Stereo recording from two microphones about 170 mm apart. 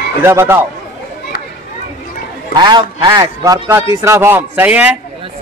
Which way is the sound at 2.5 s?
25° right (ahead or behind).